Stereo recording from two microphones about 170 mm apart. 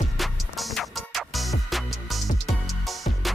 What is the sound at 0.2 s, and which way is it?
Music, centre (ahead or behind).